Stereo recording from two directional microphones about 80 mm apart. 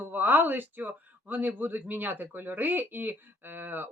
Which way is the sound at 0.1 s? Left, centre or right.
Right.